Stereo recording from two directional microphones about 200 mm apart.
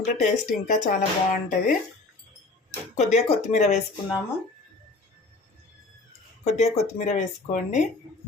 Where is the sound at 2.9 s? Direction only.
35° left (ahead or behind).